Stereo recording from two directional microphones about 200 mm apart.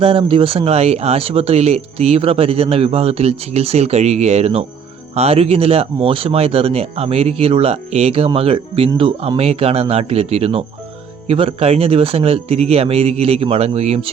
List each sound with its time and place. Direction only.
0.0 s speech: 25° right (ahead or behind)